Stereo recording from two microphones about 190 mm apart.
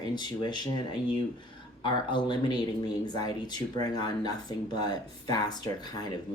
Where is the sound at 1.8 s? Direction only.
25° left (ahead or behind).